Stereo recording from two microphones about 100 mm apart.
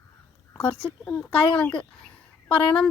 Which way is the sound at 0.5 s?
15° left (ahead or behind).